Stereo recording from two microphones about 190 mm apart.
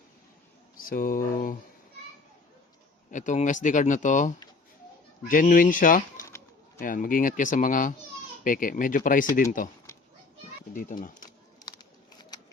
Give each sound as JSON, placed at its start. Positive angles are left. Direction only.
{"t": 0.8, "sound": "speech", "side_deg": 45}
{"t": 3.1, "sound": "speech", "side_deg": 40}
{"t": 10.8, "sound": "speech", "side_deg": 45}